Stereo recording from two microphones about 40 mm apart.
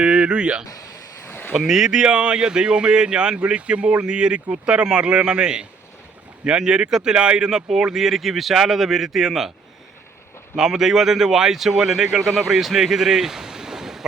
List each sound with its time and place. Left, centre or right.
0.0 s speech: right
1.3 s a sound: left
1.5 s a man's voice: centre
10.7 s speech: centre
12.1 s speech: centre